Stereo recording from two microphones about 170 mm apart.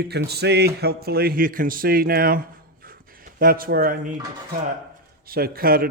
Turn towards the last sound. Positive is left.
turn(degrees=-60)  # may be behind; listen again after turning